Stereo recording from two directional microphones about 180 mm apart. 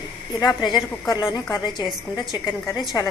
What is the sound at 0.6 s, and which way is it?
A woman's voice, 25° left (ahead or behind).